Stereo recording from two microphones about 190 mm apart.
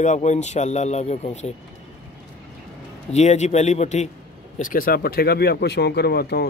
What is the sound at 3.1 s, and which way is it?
A man's voice, 35° left (ahead or behind).